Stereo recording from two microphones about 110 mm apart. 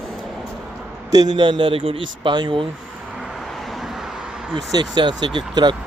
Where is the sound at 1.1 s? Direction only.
40° right (ahead or behind).